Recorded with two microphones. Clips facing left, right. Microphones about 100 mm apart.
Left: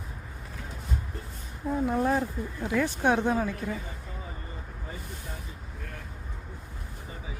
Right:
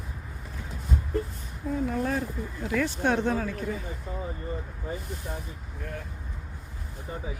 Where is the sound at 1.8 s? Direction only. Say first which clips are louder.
Left 4 dB; 25° left (ahead or behind).